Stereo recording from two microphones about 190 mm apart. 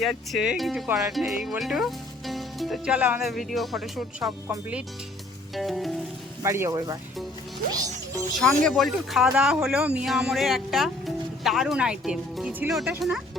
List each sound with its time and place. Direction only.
0.0 s speech: centre (ahead or behind)
4.3 s speech: 15° right (ahead or behind)
5.5 s speech: centre (ahead or behind)
6.4 s speech: 15° right (ahead or behind)
8.3 s speech: 5° left (ahead or behind)